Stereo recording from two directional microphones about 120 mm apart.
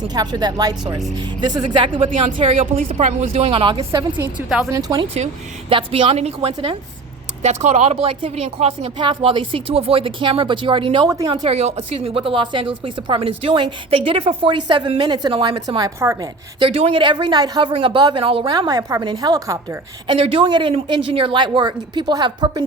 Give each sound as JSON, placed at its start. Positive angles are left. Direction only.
{"t": 0.1, "sound": "a woman's voice", "side_deg": -35}
{"t": 2.6, "sound": "speech", "side_deg": -85}
{"t": 4.4, "sound": "speech", "side_deg": -5}
{"t": 4.7, "sound": "a woman's voice", "side_deg": -30}
{"t": 5.1, "sound": "a woman's voice", "side_deg": -55}
{"t": 7.4, "sound": "speech", "side_deg": -70}
{"t": 9.0, "sound": "a woman's voice", "side_deg": -45}
{"t": 11.3, "sound": "a woman's voice", "side_deg": -60}
{"t": 16.6, "sound": "a woman's voice", "side_deg": -50}
{"t": 18.5, "sound": "a woman's voice", "side_deg": -30}
{"t": 20.1, "sound": "a woman's voice", "side_deg": -50}